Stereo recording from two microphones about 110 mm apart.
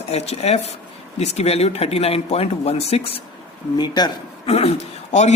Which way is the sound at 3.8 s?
40° left (ahead or behind).